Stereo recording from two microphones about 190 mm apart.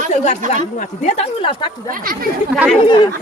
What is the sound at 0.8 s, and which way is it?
Speech, 35° left (ahead or behind).